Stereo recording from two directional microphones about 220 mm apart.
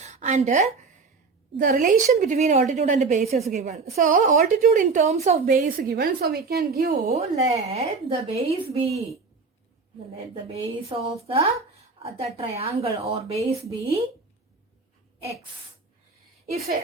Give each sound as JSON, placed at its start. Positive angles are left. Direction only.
{"t": 0.0, "sound": "a woman's voice", "side_deg": -30}
{"t": 7.1, "sound": "speech", "side_deg": -30}
{"t": 10.2, "sound": "speech", "side_deg": -25}